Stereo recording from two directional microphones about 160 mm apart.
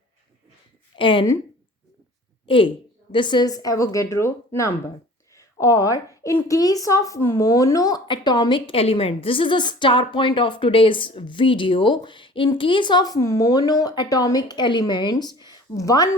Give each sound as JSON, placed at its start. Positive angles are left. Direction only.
{"t": 0.9, "sound": "a woman's voice", "side_deg": 30}
{"t": 2.5, "sound": "a woman's voice", "side_deg": 30}